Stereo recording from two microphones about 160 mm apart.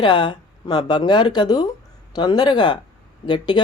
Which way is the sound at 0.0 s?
30° left (ahead or behind).